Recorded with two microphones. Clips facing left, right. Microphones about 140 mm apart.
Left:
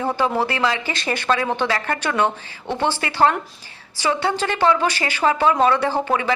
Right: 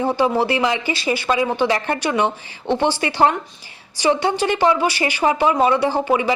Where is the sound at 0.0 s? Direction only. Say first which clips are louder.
Right 3 dB; 15° right (ahead or behind).